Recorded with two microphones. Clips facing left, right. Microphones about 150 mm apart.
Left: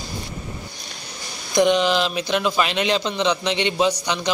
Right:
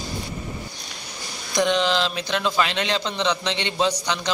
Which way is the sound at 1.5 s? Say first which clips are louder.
Left 4 dB; 15° left (ahead or behind).